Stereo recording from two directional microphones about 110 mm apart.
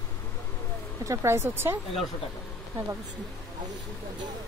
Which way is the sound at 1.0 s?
25° right (ahead or behind).